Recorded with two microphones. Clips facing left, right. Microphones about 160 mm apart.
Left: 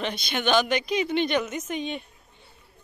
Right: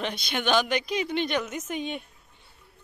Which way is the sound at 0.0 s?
5° right (ahead or behind).